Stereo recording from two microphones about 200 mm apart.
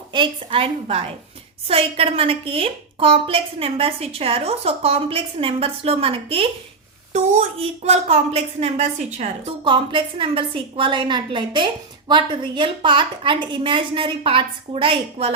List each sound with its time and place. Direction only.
0.1 s a woman's voice: 25° right (ahead or behind)
9.6 s a woman's voice: 25° right (ahead or behind)